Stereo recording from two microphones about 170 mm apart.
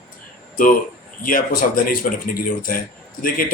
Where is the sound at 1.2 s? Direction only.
55° left (ahead or behind).